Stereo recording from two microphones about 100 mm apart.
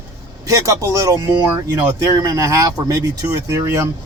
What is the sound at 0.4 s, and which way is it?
Speech, 35° right (ahead or behind).